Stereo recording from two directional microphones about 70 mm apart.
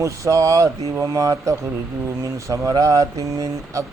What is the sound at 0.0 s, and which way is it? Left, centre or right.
Mantra, right.